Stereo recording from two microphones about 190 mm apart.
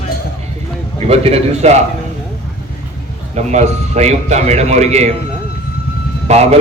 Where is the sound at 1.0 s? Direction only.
30° right (ahead or behind).